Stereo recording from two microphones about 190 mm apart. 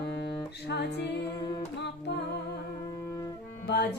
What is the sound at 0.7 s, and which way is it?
Music, 65° left (ahead or behind).